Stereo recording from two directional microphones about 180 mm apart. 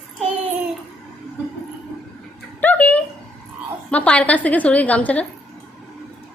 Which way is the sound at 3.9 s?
5° left (ahead or behind).